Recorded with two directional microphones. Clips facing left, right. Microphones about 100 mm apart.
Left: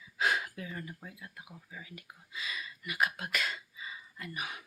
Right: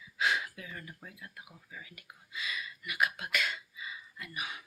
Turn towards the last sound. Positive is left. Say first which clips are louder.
# left 1 dB
turn(degrees=45)  # may be behind; listen again after turning